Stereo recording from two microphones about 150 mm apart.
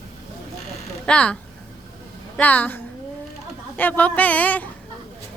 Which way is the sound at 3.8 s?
10° left (ahead or behind).